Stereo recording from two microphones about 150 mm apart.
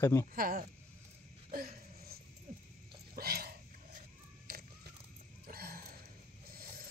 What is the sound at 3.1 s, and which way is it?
Sneeze, 90° right.